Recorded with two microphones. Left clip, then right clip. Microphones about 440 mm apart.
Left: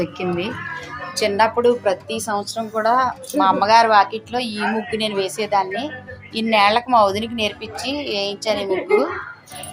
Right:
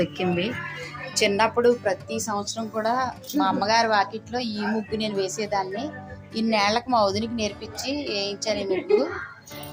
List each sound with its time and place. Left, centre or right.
0.0 s a woman's voice: right